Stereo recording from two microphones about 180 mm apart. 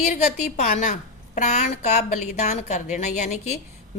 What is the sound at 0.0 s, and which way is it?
A woman's voice, 40° left (ahead or behind).